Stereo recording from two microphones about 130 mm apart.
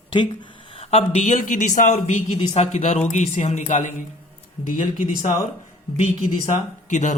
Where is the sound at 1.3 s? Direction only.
75° left (ahead or behind).